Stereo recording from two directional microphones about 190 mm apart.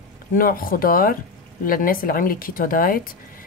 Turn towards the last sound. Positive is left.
turn(degrees=50)  # may be behind; listen again after turning